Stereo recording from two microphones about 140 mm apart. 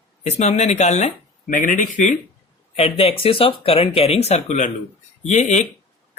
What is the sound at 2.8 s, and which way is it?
Speech, 45° left (ahead or behind).